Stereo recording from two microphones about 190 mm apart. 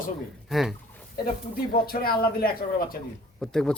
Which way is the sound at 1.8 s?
50° left (ahead or behind).